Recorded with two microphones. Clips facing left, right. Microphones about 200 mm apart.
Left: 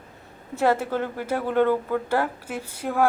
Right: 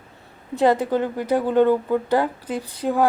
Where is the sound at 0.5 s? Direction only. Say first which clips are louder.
Right 4 dB; 15° right (ahead or behind).